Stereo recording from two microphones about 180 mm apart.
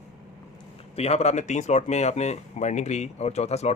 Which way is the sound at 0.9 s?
35° left (ahead or behind).